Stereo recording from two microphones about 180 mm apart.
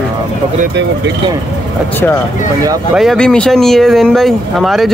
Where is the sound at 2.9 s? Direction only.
Centre (ahead or behind).